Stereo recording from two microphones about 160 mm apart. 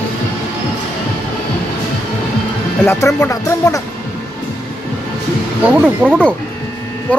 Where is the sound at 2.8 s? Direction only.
15° left (ahead or behind).